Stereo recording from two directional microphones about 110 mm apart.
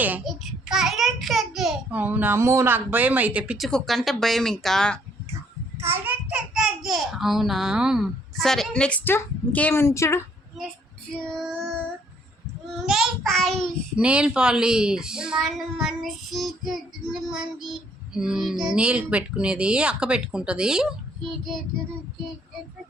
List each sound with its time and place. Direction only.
0.3 s a child's voice: 5° right (ahead or behind)
1.9 s speech: 15° right (ahead or behind)
3.6 s a woman's voice: 5° left (ahead or behind)
5.8 s a child's voice: 20° right (ahead or behind)
6.5 s a woman's voice: 5° right (ahead or behind); by 9.7 s 15° left (ahead or behind)
9.7 s a woman's voice: 25° left (ahead or behind)
11.1 s a woman's voice: 5° left (ahead or behind)
12.7 s child singing: 5° right (ahead or behind)
13.9 s a woman's voice: 10° right (ahead or behind)